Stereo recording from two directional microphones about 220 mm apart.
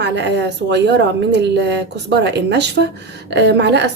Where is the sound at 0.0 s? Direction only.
50° right (ahead or behind).